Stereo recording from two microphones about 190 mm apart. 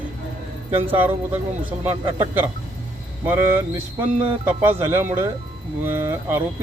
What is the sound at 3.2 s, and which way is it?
Speech, 10° right (ahead or behind).